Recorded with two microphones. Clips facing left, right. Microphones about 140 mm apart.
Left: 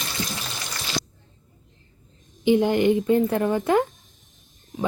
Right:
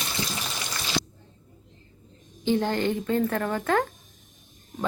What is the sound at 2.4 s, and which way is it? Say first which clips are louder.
Speech: left 6 dB; 15° left (ahead or behind).